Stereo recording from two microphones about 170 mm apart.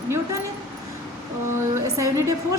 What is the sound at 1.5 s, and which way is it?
Speech, 20° right (ahead or behind).